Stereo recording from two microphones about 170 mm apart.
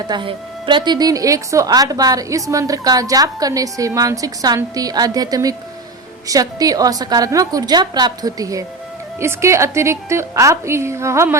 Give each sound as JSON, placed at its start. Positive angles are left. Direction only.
{"t": 0.1, "sound": "a woman's voice", "side_deg": -30}